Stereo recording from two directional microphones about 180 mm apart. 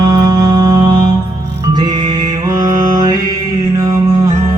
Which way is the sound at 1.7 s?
25° right (ahead or behind).